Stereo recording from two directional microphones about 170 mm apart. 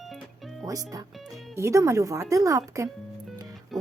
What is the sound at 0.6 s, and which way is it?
A woman's voice, 20° right (ahead or behind).